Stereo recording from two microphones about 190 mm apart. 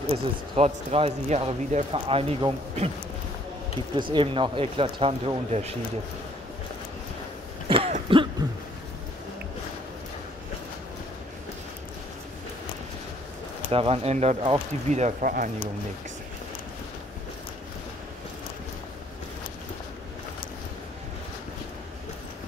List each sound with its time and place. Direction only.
0.1 s speech: 30° right (ahead or behind)
4.1 s speech: 25° right (ahead or behind)
7.6 s throat clearing: 30° right (ahead or behind)
13.7 s speech: 30° right (ahead or behind)